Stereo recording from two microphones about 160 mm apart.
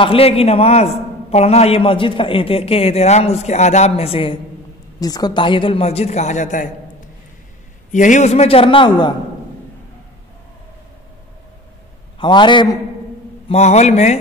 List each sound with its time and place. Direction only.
0.0 s a man's voice: 35° left (ahead or behind)
5.0 s a man's voice: 25° left (ahead or behind); by 6.7 s 50° left (ahead or behind)
7.9 s a man's voice: 50° left (ahead or behind); by 9.1 s 30° left (ahead or behind)
12.2 s a man's voice: 30° left (ahead or behind)
13.5 s a man's voice: 45° left (ahead or behind)